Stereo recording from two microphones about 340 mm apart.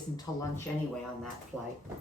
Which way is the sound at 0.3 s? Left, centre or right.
Centre.